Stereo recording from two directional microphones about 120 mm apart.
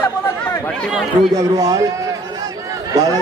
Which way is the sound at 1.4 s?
30° right (ahead or behind).